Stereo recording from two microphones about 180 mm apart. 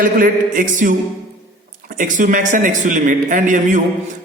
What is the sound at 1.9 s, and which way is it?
Music, 45° right (ahead or behind).